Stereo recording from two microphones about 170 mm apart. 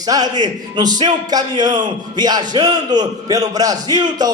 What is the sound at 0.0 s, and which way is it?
A man's voice, 25° right (ahead or behind).